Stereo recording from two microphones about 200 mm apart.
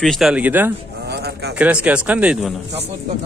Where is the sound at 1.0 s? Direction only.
55° right (ahead or behind).